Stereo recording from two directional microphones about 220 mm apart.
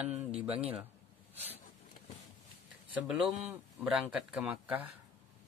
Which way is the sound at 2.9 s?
5° right (ahead or behind).